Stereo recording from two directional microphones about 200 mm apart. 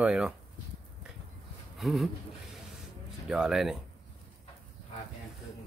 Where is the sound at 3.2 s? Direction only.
Centre (ahead or behind).